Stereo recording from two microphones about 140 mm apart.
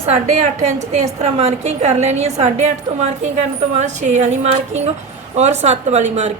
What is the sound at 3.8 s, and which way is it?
A woman's voice, 55° right (ahead or behind).